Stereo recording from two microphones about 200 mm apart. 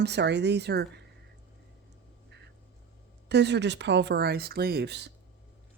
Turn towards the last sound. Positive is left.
turn(degrees=-55)  # may be behind; listen again after turning